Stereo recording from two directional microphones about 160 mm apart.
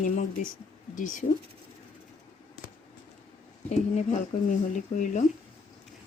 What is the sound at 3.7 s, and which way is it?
Speech, 50° left (ahead or behind).